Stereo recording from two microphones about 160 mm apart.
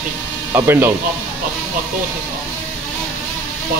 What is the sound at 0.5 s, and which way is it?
Speech, 15° right (ahead or behind).